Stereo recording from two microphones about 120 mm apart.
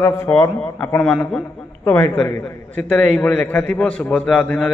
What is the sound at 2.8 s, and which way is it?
Speech, 5° left (ahead or behind).